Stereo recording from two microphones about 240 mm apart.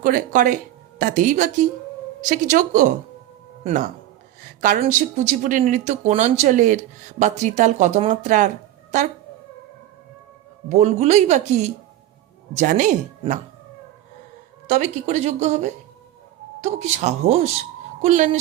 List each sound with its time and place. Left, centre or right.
0.0 s speech: right
10.7 s speech: right
14.7 s speech: right